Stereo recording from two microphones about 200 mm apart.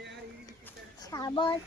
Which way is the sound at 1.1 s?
20° left (ahead or behind).